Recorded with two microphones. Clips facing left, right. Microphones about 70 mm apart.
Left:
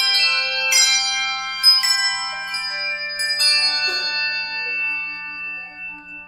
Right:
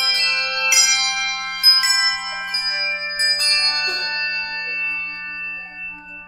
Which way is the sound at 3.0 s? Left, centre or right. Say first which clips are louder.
Right 1 dB; centre.